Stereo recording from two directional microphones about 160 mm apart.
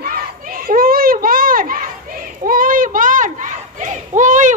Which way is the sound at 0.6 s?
65° right (ahead or behind).